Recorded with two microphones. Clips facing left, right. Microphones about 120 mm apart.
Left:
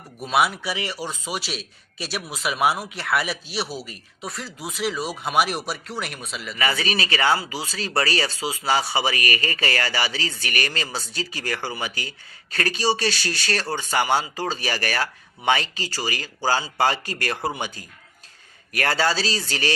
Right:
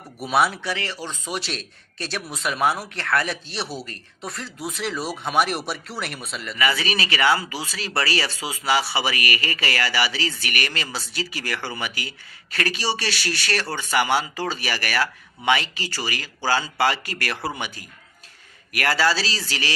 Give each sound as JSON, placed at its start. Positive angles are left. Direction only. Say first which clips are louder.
{"t": 0.2, "sound": "a man's voice", "louder": "right 1 dB", "side_deg": 0}
{"t": 6.6, "sound": "speech", "louder": "right 1 dB", "side_deg": 40}
{"t": 10.4, "sound": "speech", "louder": "left 1 dB", "side_deg": 35}
{"t": 11.7, "sound": "speech", "louder": "even", "side_deg": 25}
{"t": 12.5, "sound": "speech", "louder": "left 3 dB", "side_deg": 40}
{"t": 14.0, "sound": "speech", "louder": "even", "side_deg": 20}
{"t": 14.3, "sound": "speech", "louder": "left 1 dB", "side_deg": 35}
{"t": 15.4, "sound": "speech", "louder": "even", "side_deg": 40}
{"t": 17.2, "sound": "speech", "louder": "left 2 dB", "side_deg": 25}
{"t": 18.7, "sound": "speech", "louder": "right 1 dB", "side_deg": 25}
{"t": 19.5, "sound": "speech", "louder": "left 3 dB", "side_deg": 40}